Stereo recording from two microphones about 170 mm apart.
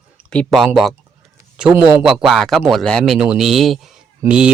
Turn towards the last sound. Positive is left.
turn(degrees=-5)  # may be behind; listen again after turning